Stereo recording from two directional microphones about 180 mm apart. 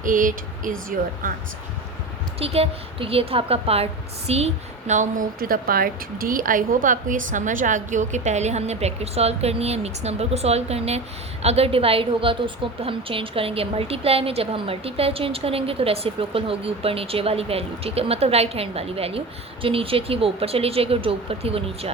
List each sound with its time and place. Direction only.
0.0 s speech: 45° right (ahead or behind)
2.4 s a woman's voice: 35° right (ahead or behind)